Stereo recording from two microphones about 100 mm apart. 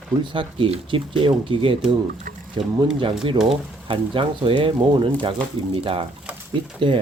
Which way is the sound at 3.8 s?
60° right (ahead or behind).